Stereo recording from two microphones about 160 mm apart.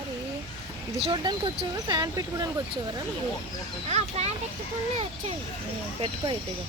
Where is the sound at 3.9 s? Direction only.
45° right (ahead or behind).